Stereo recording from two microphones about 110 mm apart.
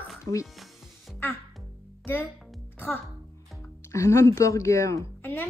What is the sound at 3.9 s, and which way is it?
A woman's voice, 25° left (ahead or behind).